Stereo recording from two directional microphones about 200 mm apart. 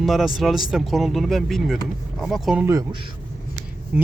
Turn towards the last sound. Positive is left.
turn(degrees=-5)  # may be behind; listen again after turning